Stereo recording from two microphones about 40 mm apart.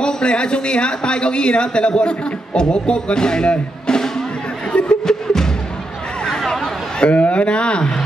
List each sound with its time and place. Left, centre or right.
0.0 s speech: left
5.0 s music: centre
6.2 s a sound: centre
7.2 s speech: left